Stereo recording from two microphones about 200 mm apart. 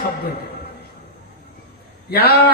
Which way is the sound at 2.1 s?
50° left (ahead or behind).